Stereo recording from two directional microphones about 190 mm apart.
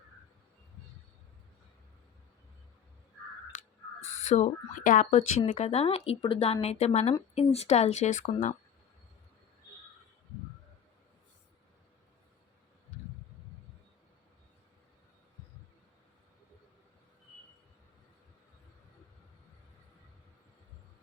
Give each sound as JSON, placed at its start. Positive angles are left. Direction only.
{"t": 4.2, "sound": "speech", "side_deg": 40}
{"t": 5.5, "sound": "speech", "side_deg": 35}